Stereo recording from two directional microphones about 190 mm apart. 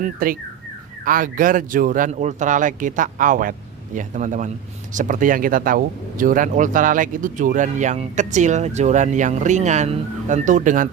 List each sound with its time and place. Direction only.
0.0 s speech: 50° right (ahead or behind)